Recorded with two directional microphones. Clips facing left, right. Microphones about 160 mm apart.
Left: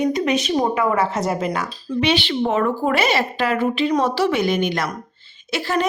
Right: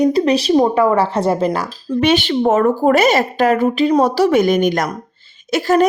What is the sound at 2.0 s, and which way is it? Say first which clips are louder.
A woman's voice: right 5 dB; 45° right (ahead or behind).